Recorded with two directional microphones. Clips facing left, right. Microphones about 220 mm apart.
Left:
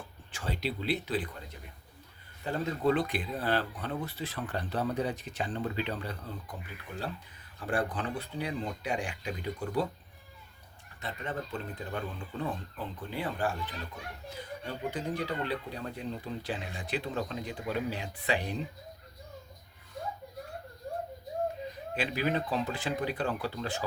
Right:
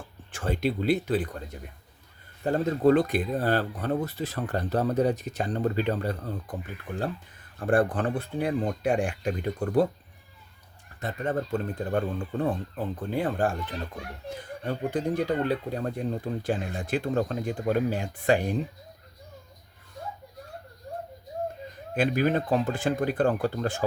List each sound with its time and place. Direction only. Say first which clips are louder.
0.3 s speech: right 8 dB; 50° right (ahead or behind)
2.4 s speech: right 7 dB; 45° right (ahead or behind)
7.6 s speech: right 8 dB; 50° right (ahead or behind)
11.0 s speech: right 8 dB; 45° right (ahead or behind)
21.9 s speech: right 7 dB; 50° right (ahead or behind)